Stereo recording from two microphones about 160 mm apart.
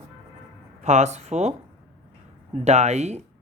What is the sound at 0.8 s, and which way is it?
Speech, 45° right (ahead or behind).